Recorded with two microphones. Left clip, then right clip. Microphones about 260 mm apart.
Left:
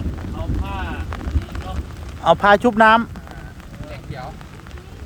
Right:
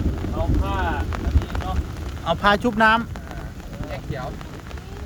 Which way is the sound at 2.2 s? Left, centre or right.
Centre.